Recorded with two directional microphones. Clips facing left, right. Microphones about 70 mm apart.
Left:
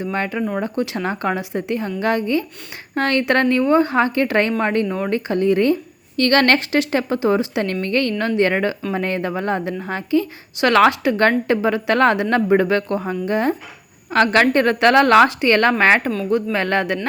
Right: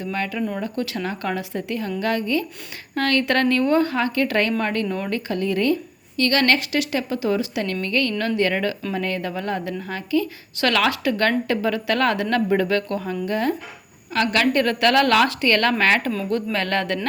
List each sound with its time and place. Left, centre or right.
0.0 s a woman's voice: left
6.1 s a woman's voice: left
14.1 s a woman's voice: left; by 17.1 s centre